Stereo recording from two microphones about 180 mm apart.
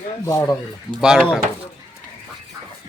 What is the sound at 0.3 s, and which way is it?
Speech, 20° left (ahead or behind).